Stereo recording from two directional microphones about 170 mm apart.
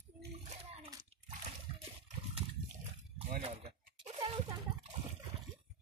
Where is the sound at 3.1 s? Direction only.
35° right (ahead or behind).